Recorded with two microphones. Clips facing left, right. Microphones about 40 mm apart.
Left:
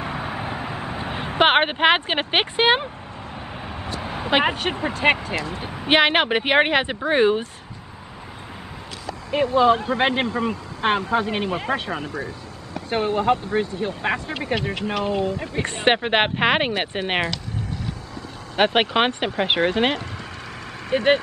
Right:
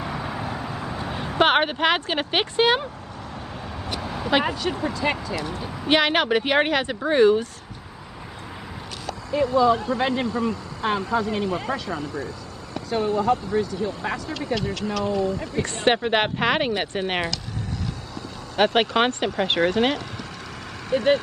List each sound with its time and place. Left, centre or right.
0.0 s vehicle: left
4.5 s speech: left
5.7 s speech: left
9.3 s speech: left
14.5 s speech: left
15.5 s speech: left
18.6 s speech: left
20.9 s speech: left